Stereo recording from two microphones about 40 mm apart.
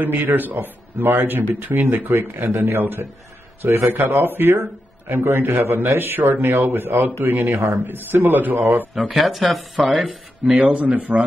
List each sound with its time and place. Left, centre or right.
0.0 s a man's voice: right
9.1 s speech: centre
10.4 s a man's voice: right